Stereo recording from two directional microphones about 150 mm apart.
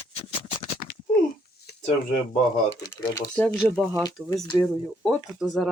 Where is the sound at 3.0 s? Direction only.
20° left (ahead or behind).